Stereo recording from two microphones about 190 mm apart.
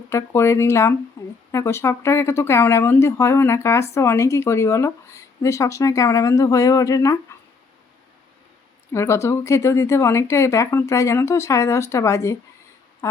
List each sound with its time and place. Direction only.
0.1 s speech: 15° left (ahead or behind)
1.2 s a sound: 15° left (ahead or behind)
1.5 s speech: 15° left (ahead or behind)
8.9 s speech: 15° left (ahead or behind)